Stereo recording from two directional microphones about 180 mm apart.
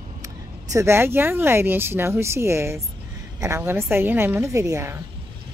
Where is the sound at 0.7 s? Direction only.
15° right (ahead or behind).